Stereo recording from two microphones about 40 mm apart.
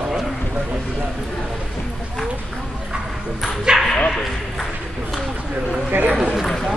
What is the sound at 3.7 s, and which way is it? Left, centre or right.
Bow-wow, centre.